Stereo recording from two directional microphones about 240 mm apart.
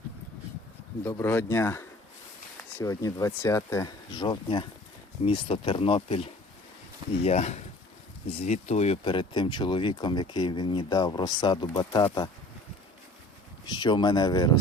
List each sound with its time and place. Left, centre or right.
1.0 s speech: centre
13.7 s speech: centre